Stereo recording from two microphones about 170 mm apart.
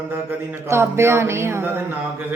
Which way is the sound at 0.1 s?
15° right (ahead or behind).